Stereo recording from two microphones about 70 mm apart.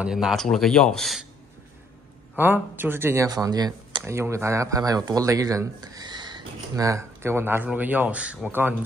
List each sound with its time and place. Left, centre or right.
0.0 s speech: centre
0.4 s speech: centre
2.3 s speech: right
3.3 s speech: right
4.0 s speech: right
6.7 s speech: right; by 8.4 s centre
8.5 s speech: right